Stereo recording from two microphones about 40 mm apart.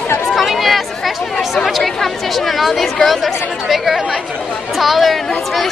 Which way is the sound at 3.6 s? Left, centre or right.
Centre.